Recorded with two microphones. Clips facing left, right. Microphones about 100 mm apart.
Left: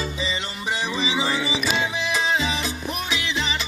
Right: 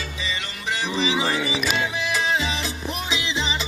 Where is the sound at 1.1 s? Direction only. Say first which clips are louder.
Right 1 dB; 20° left (ahead or behind).